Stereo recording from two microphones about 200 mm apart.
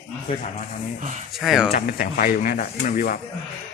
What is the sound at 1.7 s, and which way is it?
Speech, 45° left (ahead or behind).